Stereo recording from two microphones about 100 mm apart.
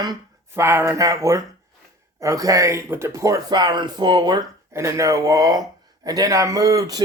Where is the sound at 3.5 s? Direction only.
45° right (ahead or behind).